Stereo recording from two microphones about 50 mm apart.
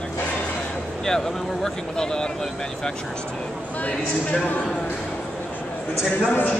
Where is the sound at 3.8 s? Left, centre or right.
Left.